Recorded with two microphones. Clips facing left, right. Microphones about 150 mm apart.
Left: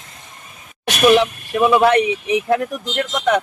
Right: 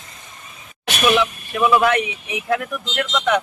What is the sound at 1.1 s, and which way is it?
Speech, 35° left (ahead or behind).